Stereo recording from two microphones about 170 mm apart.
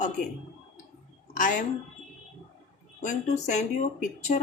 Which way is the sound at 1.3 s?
50° left (ahead or behind).